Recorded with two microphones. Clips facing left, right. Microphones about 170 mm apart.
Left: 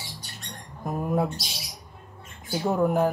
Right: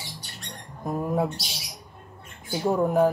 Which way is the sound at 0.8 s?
Centre (ahead or behind).